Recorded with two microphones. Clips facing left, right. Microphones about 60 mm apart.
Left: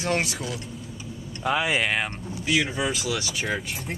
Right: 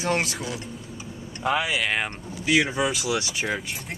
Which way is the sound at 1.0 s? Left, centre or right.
Centre.